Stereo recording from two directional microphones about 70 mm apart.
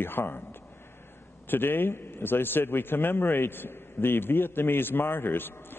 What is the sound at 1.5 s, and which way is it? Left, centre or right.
A man's voice, left.